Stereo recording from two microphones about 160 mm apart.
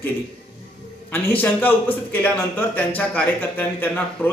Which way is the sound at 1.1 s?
10° left (ahead or behind).